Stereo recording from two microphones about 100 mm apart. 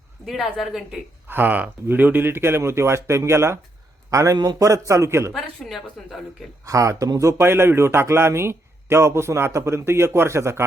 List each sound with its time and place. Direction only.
0.3 s a woman's voice: centre (ahead or behind)
1.3 s speech: 20° right (ahead or behind)
5.3 s a woman's voice: centre (ahead or behind)
6.7 s speech: 35° right (ahead or behind)